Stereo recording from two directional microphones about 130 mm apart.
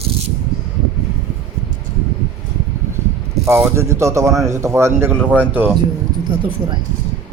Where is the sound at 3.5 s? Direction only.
20° right (ahead or behind).